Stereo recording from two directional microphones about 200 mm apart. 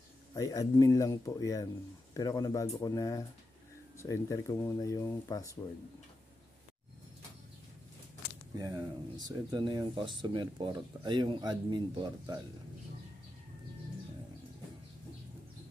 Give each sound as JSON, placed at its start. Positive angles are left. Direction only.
{"t": 0.3, "sound": "speech", "side_deg": 15}
{"t": 8.5, "sound": "speech", "side_deg": -20}